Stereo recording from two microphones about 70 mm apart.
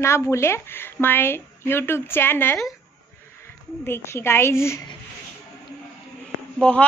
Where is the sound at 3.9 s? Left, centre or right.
Left.